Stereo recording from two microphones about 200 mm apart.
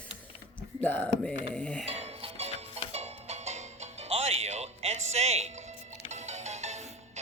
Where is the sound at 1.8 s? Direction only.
30° right (ahead or behind).